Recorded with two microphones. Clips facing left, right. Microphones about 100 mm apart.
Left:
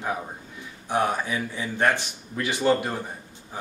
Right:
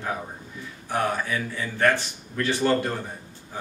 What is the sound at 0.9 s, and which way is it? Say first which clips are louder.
Speech: left 1 dB; 20° left (ahead or behind).